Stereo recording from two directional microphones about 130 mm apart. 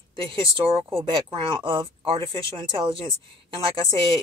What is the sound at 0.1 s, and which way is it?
A woman's voice, 40° right (ahead or behind).